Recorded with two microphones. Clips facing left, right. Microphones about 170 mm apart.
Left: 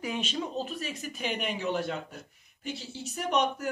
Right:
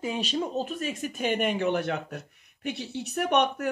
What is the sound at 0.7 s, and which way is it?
Speech, 50° right (ahead or behind).